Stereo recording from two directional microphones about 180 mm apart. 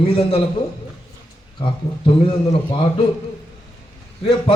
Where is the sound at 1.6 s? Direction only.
30° left (ahead or behind).